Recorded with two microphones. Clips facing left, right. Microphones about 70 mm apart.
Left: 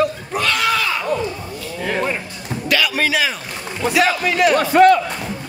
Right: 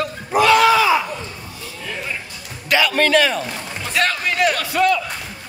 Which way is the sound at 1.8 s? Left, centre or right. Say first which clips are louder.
Left 9 dB; left.